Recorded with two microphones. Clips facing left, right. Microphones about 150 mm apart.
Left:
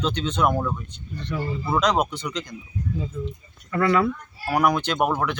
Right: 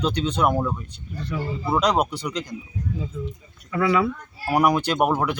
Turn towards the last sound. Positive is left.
turn(degrees=-10)  # may be behind; listen again after turning